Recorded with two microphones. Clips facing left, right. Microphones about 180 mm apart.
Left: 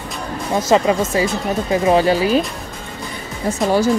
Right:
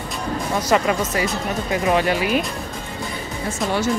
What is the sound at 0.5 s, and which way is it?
Speech, 25° left (ahead or behind).